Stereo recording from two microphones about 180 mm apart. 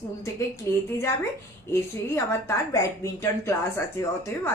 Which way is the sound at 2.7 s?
15° left (ahead or behind).